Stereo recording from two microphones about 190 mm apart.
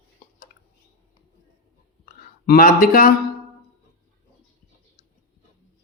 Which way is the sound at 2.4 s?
50° left (ahead or behind).